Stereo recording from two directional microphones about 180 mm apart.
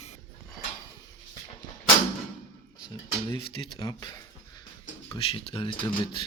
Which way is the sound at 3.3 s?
25° left (ahead or behind).